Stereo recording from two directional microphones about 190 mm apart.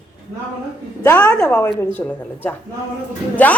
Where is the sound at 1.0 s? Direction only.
10° left (ahead or behind).